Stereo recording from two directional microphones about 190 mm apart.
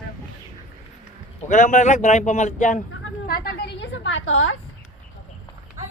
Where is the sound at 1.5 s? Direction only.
40° left (ahead or behind).